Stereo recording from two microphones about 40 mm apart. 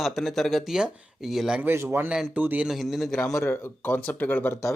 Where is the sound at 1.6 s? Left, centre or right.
Right.